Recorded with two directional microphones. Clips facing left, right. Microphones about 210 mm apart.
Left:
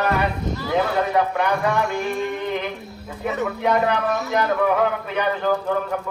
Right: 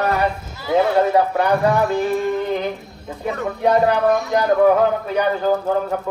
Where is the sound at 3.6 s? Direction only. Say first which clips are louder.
Right 6 dB; 35° right (ahead or behind).